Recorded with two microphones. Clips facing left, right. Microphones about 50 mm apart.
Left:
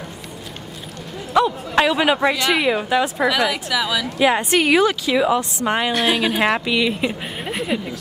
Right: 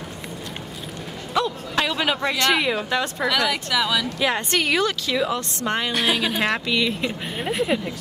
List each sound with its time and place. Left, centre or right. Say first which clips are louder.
1.3 s a woman's voice: left 6 dB; centre
2.3 s a woman's voice: left 2 dB; centre
4.2 s a woman's voice: left 9 dB; centre
5.9 s a woman's voice: left 3 dB; centre
7.4 s a woman's voice: right 1 dB; centre